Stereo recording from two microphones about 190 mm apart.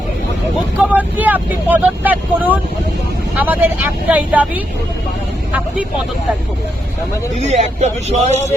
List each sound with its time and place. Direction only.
0.8 s speech: 10° right (ahead or behind)
7.3 s a man's voice: 35° right (ahead or behind)